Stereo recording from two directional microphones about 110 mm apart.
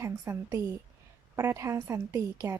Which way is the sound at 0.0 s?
25° right (ahead or behind).